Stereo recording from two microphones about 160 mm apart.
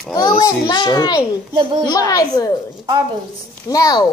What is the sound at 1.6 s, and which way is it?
Child singing, 30° right (ahead or behind).